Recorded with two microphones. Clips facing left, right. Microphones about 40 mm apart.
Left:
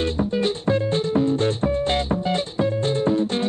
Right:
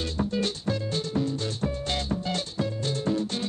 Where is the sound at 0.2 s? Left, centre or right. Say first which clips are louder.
Left 6 dB; left.